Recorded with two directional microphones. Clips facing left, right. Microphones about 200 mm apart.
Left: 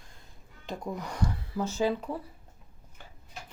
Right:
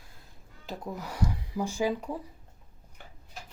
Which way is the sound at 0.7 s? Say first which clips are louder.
Left 2 dB; 5° right (ahead or behind).